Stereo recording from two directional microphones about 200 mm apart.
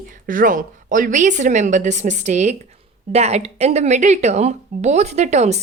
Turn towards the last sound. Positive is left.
turn(degrees=-35)  # may be behind; listen again after turning